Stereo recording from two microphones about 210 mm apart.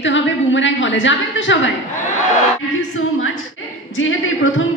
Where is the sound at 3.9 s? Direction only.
70° left (ahead or behind).